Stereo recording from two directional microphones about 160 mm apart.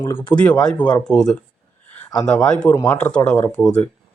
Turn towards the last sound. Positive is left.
turn(degrees=5)  # may be behind; listen again after turning